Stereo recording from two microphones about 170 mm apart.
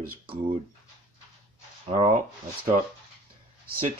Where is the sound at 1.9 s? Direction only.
40° right (ahead or behind).